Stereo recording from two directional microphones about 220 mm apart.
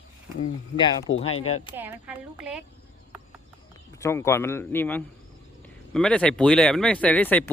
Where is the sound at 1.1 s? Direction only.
65° left (ahead or behind).